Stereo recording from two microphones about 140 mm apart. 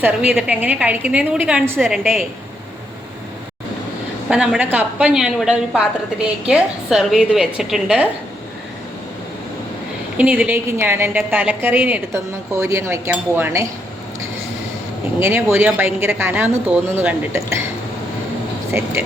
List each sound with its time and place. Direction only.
0.0 s a woman's voice: 10° right (ahead or behind)
1.9 s a woman's voice: centre (ahead or behind)
4.3 s a woman's voice: 5° right (ahead or behind)
10.2 s a woman's voice: 10° right (ahead or behind)
12.1 s speech: 20° right (ahead or behind)
15.2 s a woman's voice: 15° right (ahead or behind)